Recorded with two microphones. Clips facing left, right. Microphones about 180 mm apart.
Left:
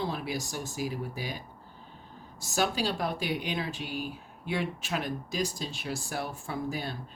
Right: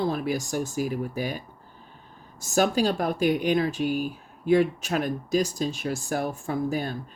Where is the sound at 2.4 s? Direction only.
45° right (ahead or behind).